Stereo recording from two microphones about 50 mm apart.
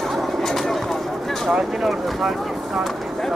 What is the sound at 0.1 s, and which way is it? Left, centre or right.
Bird, centre.